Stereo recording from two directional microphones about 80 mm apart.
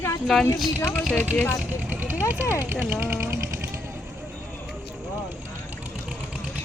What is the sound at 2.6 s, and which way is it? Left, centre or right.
Speech, right.